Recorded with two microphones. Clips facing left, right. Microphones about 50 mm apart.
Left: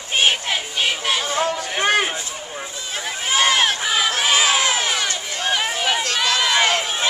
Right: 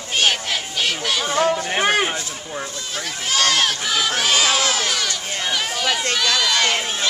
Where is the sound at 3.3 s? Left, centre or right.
Centre.